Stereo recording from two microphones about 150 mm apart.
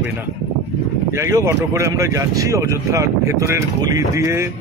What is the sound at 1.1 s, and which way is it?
Speech, 20° right (ahead or behind).